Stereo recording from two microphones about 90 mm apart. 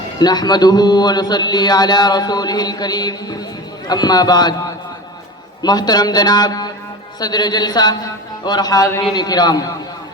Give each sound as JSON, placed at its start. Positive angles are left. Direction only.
{"t": 0.2, "sound": "speech", "side_deg": 50}
{"t": 5.6, "sound": "speech", "side_deg": 50}